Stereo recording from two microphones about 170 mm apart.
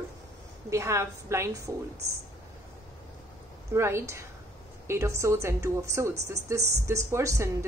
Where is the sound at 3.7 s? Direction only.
15° right (ahead or behind).